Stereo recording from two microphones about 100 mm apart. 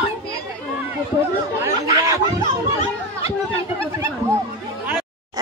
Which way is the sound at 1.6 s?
35° right (ahead or behind).